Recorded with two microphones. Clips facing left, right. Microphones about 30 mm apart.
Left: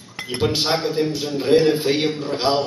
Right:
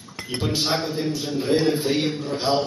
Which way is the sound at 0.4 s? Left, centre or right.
Left.